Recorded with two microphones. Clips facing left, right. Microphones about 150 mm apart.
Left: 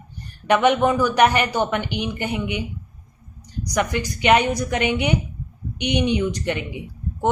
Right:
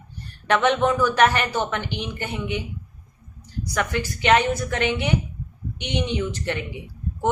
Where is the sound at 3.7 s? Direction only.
15° left (ahead or behind).